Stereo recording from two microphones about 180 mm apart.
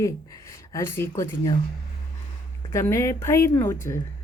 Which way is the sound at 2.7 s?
15° left (ahead or behind).